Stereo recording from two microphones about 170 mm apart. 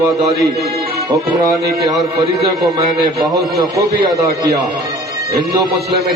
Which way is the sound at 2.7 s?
25° right (ahead or behind).